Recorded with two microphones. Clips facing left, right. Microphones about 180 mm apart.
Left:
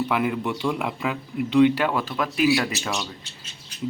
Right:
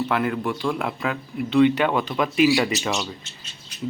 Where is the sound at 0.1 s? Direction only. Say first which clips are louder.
Right 1 dB; 10° left (ahead or behind).